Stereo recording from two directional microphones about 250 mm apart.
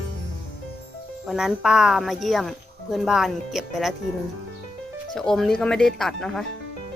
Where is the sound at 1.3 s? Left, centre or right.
Centre.